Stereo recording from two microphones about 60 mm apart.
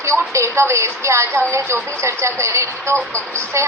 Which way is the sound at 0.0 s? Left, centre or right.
Right.